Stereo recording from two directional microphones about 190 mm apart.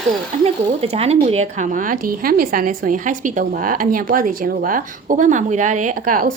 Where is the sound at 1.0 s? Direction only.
35° right (ahead or behind).